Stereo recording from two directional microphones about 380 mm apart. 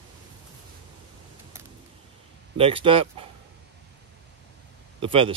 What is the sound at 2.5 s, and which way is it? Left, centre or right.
Speech, centre.